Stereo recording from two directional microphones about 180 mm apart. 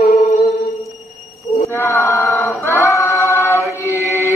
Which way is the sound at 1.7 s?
15° left (ahead or behind).